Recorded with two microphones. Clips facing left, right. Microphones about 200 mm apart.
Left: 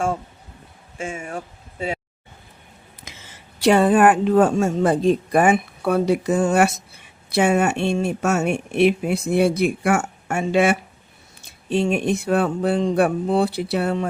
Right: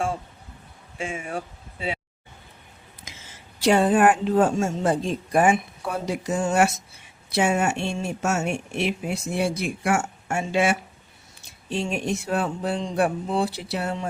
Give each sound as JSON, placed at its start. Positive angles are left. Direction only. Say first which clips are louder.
{"t": 0.9, "sound": "speech", "louder": "left 1 dB", "side_deg": 45}
{"t": 3.6, "sound": "speech", "louder": "left 3 dB", "side_deg": 60}